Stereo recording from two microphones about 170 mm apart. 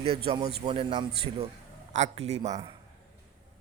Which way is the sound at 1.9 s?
40° right (ahead or behind).